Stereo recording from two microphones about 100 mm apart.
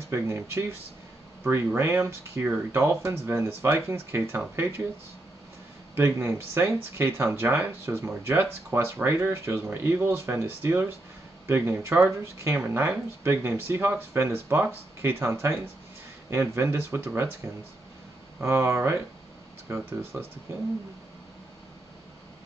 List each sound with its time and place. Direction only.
0.1 s speech: 30° right (ahead or behind)
5.9 s speech: 25° right (ahead or behind)
18.4 s speech: 25° right (ahead or behind)